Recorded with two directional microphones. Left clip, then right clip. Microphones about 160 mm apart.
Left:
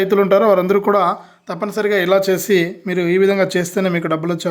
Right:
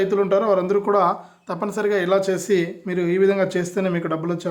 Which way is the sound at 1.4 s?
5° left (ahead or behind).